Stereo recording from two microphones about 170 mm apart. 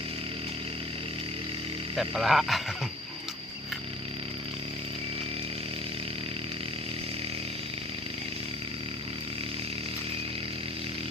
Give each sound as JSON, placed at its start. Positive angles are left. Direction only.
{"t": 2.0, "sound": "speech", "side_deg": 0}